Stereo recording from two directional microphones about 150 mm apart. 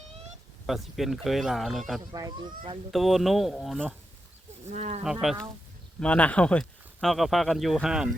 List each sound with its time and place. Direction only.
0.7 s speech: centre (ahead or behind)
2.0 s speech: 25° right (ahead or behind)
2.9 s speech: centre (ahead or behind)
4.6 s speech: 50° right (ahead or behind)
6.0 s speech: 10° left (ahead or behind)